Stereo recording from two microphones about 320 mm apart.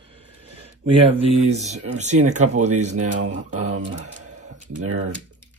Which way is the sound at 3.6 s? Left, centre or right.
Right.